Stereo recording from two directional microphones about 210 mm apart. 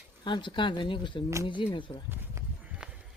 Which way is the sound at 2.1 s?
10° right (ahead or behind).